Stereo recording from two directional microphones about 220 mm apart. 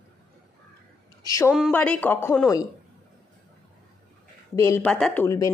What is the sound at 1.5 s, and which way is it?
Speech, centre (ahead or behind).